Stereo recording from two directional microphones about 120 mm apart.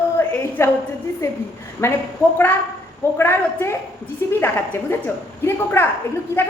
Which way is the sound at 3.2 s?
20° left (ahead or behind).